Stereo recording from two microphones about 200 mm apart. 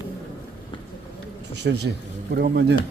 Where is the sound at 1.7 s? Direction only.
55° right (ahead or behind).